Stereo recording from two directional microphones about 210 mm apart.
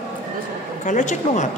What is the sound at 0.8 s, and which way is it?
Speech, 35° left (ahead or behind).